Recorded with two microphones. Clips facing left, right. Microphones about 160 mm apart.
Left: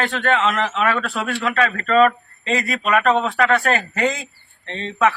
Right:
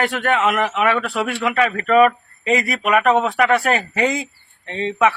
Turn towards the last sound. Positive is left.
turn(degrees=-15)  # may be behind; listen again after turning